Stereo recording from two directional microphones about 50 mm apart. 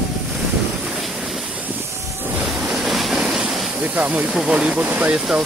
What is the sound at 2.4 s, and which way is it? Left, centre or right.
Waves, centre.